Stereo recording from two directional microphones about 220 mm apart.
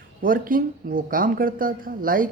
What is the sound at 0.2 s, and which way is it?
Speech, 40° right (ahead or behind).